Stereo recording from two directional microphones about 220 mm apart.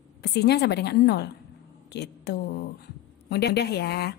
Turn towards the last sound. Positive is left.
turn(degrees=45)  # may be behind; listen again after turning